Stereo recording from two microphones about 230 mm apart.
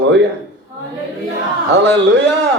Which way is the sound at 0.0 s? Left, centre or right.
Right.